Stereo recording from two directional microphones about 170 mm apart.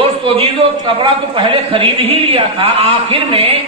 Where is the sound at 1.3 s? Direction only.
30° right (ahead or behind).